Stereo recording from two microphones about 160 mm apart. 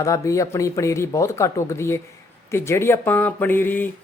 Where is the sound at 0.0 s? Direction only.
20° left (ahead or behind).